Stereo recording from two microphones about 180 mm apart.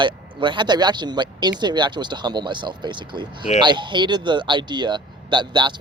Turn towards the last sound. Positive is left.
turn(degrees=-25)  # may be behind; listen again after turning